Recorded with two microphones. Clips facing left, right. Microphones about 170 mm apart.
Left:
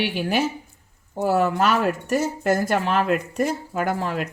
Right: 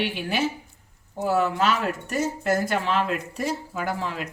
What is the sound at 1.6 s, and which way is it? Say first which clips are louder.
Speech: left 3 dB; 65° left (ahead or behind).